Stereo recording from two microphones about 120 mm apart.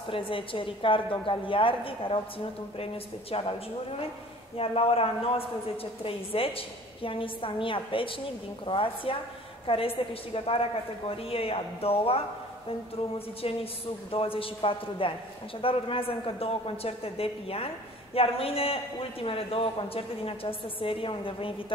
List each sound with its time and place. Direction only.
0.1 s a woman's voice: 45° left (ahead or behind)
13.4 s a woman's voice: 55° left (ahead or behind)